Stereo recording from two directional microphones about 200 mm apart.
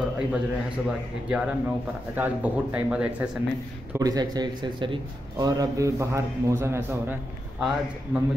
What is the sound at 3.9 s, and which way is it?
A man's voice, 20° right (ahead or behind).